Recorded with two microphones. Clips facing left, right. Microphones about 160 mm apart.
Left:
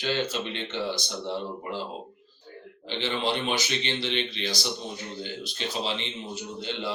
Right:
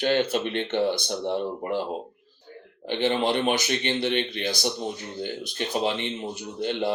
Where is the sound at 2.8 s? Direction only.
50° right (ahead or behind).